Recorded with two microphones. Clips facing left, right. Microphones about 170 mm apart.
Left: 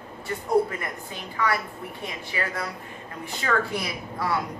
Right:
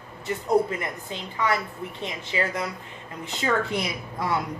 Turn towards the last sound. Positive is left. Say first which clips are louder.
# even
turn(degrees=-20)  # may be behind; listen again after turning